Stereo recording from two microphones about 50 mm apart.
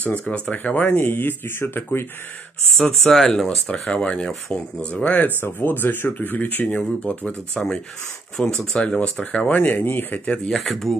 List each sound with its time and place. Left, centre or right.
0.2 s speech: left
0.9 s speech: left
2.7 s speech: centre
3.4 s speech: centre
5.1 s speech: left
7.5 s speech: centre
9.5 s speech: left
10.1 s speech: left
10.5 s speech: centre